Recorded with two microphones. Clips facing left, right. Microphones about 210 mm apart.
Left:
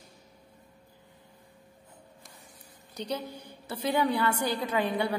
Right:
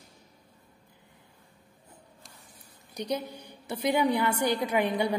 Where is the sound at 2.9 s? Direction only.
15° right (ahead or behind).